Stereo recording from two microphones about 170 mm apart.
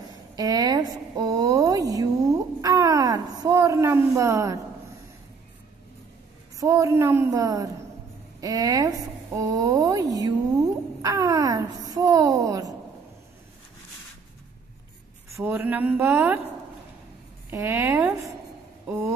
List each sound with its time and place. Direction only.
0.4 s a sound: 20° right (ahead or behind)
6.6 s a woman's voice: 20° right (ahead or behind)
15.2 s a woman's voice: 15° right (ahead or behind)
17.5 s a woman's voice: 15° right (ahead or behind)